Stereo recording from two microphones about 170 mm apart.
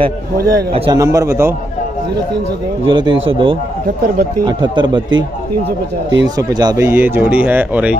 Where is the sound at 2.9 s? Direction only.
30° right (ahead or behind).